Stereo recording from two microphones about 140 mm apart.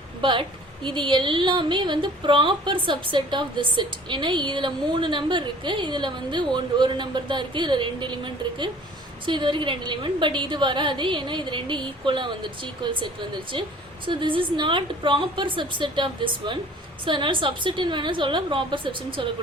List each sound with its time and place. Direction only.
0.2 s a woman's voice: 35° right (ahead or behind)